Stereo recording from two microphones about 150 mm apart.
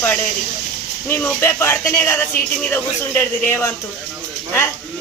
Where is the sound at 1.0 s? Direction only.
15° left (ahead or behind).